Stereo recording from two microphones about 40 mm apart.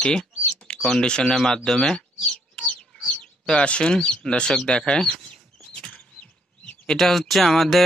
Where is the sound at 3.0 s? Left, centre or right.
Left.